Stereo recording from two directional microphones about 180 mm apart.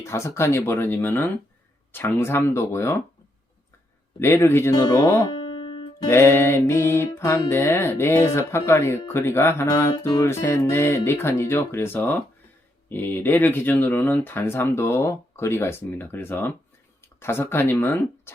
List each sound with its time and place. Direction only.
0.0 s speech: 15° left (ahead or behind)
4.2 s speech: 15° left (ahead or behind)
5.3 s music: 25° left (ahead or behind)
6.1 s speech: 15° left (ahead or behind)